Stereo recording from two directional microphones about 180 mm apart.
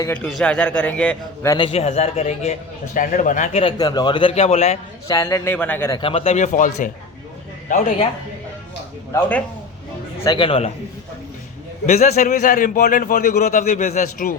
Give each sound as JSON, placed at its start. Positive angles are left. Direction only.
{"t": 0.0, "sound": "a man's voice", "side_deg": 10}
{"t": 1.5, "sound": "a man's voice", "side_deg": 30}
{"t": 5.0, "sound": "a man's voice", "side_deg": 15}
{"t": 6.0, "sound": "a man's voice", "side_deg": 30}
{"t": 10.2, "sound": "a man's voice", "side_deg": 30}
{"t": 11.9, "sound": "a man's voice", "side_deg": 40}